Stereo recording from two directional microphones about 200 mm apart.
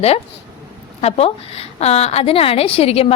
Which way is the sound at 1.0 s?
30° left (ahead or behind).